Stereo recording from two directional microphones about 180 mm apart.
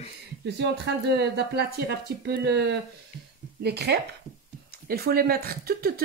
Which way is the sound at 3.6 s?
65° right (ahead or behind).